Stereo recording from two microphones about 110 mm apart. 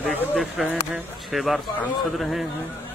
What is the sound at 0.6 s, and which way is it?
A man's voice, centre (ahead or behind).